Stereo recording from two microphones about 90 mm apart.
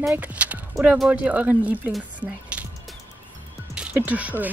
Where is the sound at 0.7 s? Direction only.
Centre (ahead or behind).